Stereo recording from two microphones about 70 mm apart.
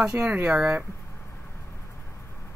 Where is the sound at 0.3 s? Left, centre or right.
Right.